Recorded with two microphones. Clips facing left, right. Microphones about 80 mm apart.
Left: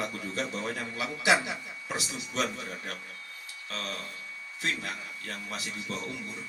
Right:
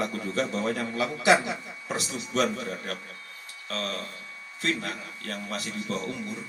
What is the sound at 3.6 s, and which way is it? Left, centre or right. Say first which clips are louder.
A man's voice: right 5 dB; right.